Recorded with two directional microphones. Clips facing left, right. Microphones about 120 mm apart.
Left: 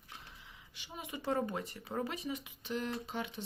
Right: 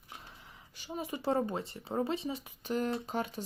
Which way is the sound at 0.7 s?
40° right (ahead or behind).